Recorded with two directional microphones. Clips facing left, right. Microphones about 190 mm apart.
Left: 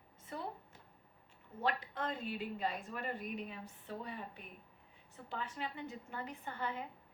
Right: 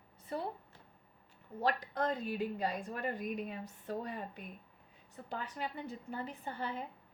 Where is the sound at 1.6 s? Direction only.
40° right (ahead or behind).